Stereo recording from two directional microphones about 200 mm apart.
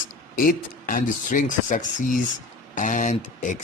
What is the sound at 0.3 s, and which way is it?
A man's voice, 45° left (ahead or behind).